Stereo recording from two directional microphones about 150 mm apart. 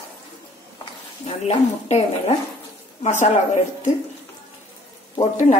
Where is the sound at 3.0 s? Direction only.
50° left (ahead or behind).